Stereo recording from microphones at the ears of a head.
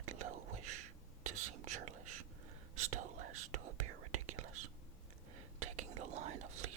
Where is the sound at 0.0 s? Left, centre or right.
Right.